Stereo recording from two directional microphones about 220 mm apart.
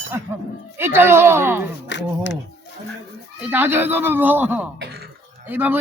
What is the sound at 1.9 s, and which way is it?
Speech, 55° left (ahead or behind).